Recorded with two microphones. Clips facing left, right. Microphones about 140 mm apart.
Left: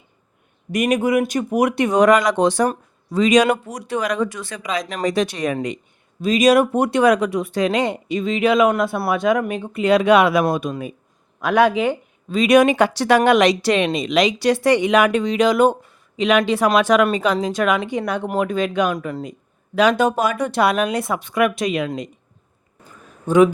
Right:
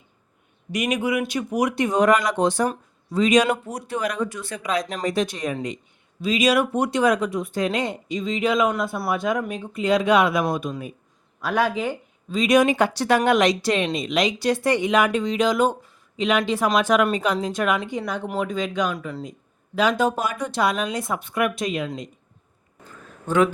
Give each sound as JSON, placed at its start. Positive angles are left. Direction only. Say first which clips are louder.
{"t": 0.7, "sound": "speech", "louder": "left 5 dB", "side_deg": 50}
{"t": 5.5, "sound": "speech", "louder": "left 4 dB", "side_deg": 65}
{"t": 6.2, "sound": "speech", "louder": "left 5 dB", "side_deg": 45}
{"t": 11.3, "sound": "speech", "louder": "left 6 dB", "side_deg": 70}
{"t": 19.2, "sound": "speech", "louder": "left 4 dB", "side_deg": 70}
{"t": 23.2, "sound": "speech", "louder": "left 6 dB", "side_deg": 15}